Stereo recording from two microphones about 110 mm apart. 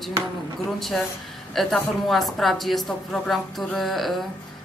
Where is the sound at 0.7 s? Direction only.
Centre (ahead or behind).